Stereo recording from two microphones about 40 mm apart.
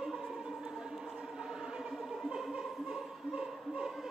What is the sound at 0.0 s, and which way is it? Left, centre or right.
Music, centre.